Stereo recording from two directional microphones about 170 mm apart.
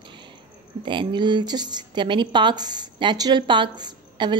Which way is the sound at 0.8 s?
30° right (ahead or behind).